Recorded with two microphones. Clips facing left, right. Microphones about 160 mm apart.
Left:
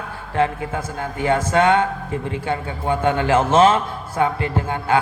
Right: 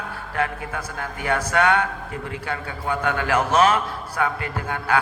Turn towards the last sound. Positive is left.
turn(degrees=25)  # may be behind; listen again after turning